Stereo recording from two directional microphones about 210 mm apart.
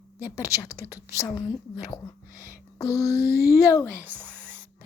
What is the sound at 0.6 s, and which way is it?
Speech, 15° left (ahead or behind).